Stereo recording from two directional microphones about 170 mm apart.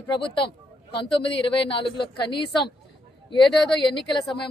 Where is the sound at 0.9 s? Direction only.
30° left (ahead or behind).